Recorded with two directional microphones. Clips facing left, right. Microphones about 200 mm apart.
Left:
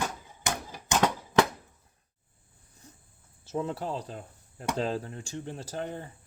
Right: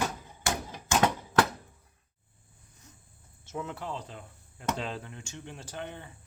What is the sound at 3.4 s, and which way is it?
Speech, 35° left (ahead or behind).